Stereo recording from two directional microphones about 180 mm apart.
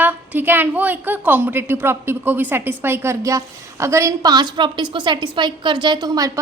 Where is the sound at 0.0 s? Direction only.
10° right (ahead or behind).